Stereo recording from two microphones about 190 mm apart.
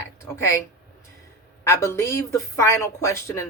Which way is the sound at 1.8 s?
15° left (ahead or behind).